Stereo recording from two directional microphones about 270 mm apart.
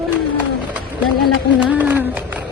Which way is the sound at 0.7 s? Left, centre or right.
Centre.